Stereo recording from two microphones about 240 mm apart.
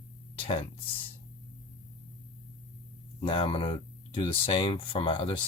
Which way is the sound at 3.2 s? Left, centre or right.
Left.